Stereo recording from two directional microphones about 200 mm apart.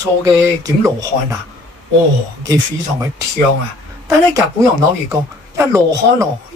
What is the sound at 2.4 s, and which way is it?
Speech, 15° right (ahead or behind).